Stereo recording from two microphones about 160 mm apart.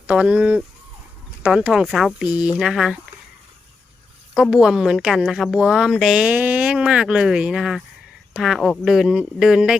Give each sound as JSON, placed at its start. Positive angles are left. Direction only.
{"t": 0.1, "sound": "a woman's voice", "side_deg": -10}
{"t": 4.4, "sound": "a woman's voice", "side_deg": -5}